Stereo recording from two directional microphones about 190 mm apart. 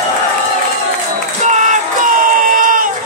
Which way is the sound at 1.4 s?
40° right (ahead or behind).